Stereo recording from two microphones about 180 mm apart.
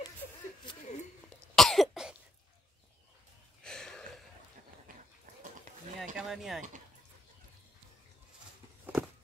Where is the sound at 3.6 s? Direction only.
5° left (ahead or behind).